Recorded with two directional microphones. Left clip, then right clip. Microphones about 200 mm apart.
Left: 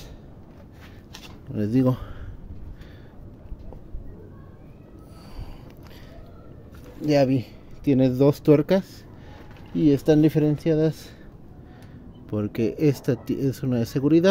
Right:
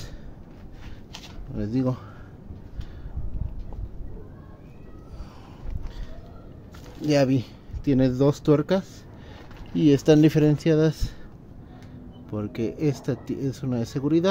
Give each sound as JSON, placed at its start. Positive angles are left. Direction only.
{"t": 1.5, "sound": "speech", "side_deg": 30}
{"t": 7.1, "sound": "speech", "side_deg": 5}
{"t": 9.8, "sound": "speech", "side_deg": -5}
{"t": 12.3, "sound": "speech", "side_deg": 25}